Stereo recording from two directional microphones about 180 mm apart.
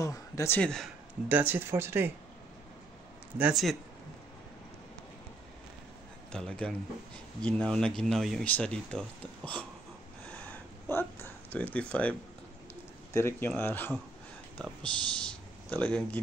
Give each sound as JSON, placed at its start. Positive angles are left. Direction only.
{"t": 0.0, "sound": "speech", "side_deg": 15}
{"t": 0.6, "sound": "speech", "side_deg": 5}
{"t": 1.3, "sound": "speech", "side_deg": -10}
{"t": 3.3, "sound": "speech", "side_deg": -5}
{"t": 6.3, "sound": "speech", "side_deg": 5}
{"t": 10.2, "sound": "a sound", "side_deg": 10}
{"t": 13.1, "sound": "speech", "side_deg": 15}